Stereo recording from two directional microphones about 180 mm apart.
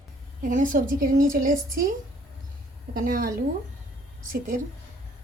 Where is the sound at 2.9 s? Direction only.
50° right (ahead or behind).